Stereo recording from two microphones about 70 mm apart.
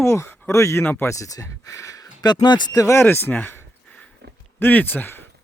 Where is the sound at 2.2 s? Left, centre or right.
Left.